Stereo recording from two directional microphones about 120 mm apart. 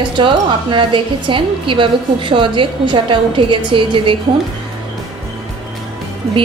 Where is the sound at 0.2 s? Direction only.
45° right (ahead or behind).